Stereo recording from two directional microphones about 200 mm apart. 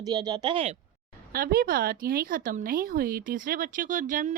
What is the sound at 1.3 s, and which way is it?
A woman's voice, 50° right (ahead or behind).